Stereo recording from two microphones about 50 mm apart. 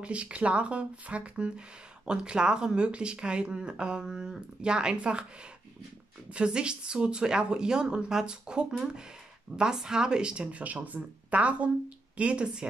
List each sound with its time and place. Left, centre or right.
0.0 s speech: right
6.3 s speech: centre